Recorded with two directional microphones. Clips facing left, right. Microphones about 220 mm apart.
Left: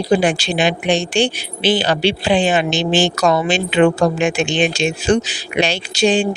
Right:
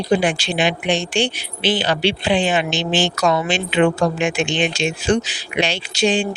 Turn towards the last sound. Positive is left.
turn(degrees=40)  # may be behind; listen again after turning